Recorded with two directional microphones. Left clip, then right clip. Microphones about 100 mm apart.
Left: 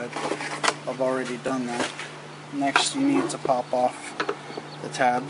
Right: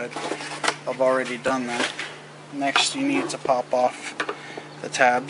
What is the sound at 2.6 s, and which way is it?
Speech, 5° right (ahead or behind).